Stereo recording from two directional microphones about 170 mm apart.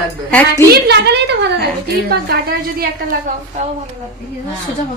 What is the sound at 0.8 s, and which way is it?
Speech, 80° right.